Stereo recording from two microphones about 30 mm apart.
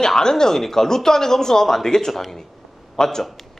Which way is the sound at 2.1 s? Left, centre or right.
Centre.